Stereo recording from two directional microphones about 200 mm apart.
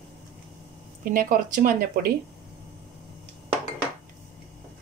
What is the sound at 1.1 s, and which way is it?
Speech, 45° right (ahead or behind).